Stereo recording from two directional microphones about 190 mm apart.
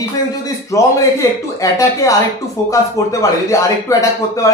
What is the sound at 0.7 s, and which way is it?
Speech, 15° left (ahead or behind).